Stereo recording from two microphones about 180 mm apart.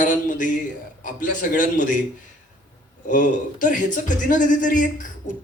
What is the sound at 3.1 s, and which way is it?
A man's voice, 45° left (ahead or behind).